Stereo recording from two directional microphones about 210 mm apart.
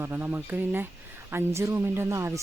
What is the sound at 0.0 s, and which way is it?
Speech, 10° right (ahead or behind).